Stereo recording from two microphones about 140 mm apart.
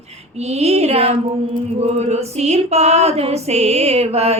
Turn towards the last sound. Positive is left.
turn(degrees=-45)  # may be behind; listen again after turning